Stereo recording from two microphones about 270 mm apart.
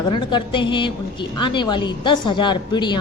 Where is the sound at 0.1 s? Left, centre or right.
Centre.